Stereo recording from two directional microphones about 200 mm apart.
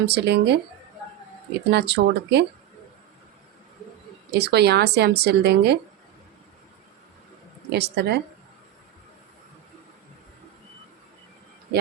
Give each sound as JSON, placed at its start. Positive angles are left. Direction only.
{"t": 0.0, "sound": "a woman's voice", "side_deg": -55}
{"t": 1.7, "sound": "a woman's voice", "side_deg": -60}
{"t": 4.3, "sound": "a woman's voice", "side_deg": -55}
{"t": 7.7, "sound": "a woman's voice", "side_deg": -55}